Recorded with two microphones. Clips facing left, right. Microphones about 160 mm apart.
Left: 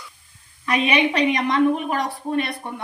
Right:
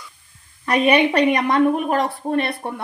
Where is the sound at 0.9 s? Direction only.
55° right (ahead or behind).